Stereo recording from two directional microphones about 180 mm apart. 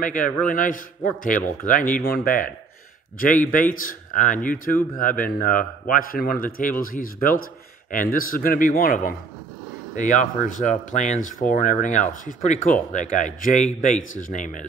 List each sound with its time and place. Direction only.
0.0 s speech: 45° left (ahead or behind)